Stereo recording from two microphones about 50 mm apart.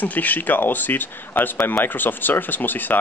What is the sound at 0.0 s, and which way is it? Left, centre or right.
Speech, left.